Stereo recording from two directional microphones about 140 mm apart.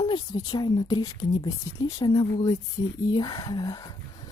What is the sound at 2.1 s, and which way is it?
Speech, 25° left (ahead or behind).